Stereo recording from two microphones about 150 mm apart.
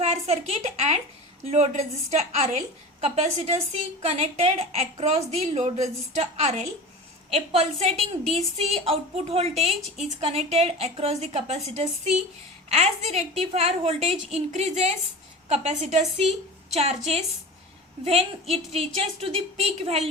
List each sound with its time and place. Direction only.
0.0 s a woman's voice: 45° right (ahead or behind)